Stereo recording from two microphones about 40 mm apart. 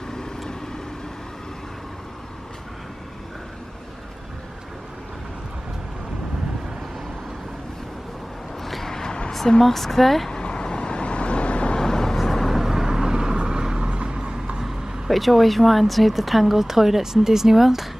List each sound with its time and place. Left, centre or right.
0.1 s vehicle: centre
8.6 s vehicle: centre
9.6 s speech: centre
10.3 s vehicle: left
11.8 s vehicle: centre
12.5 s vehicle: centre
14.6 s speech: centre